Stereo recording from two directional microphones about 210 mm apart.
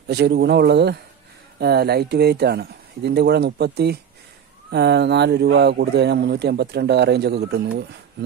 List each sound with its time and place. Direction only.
0.1 s speech: 50° right (ahead or behind)